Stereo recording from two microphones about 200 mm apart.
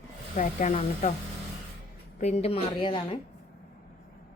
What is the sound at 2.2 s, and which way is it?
A woman's voice, 35° left (ahead or behind).